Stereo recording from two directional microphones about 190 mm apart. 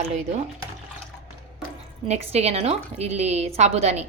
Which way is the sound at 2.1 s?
35° right (ahead or behind).